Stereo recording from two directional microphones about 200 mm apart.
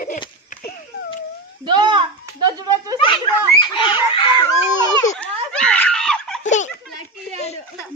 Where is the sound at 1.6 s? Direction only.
25° right (ahead or behind).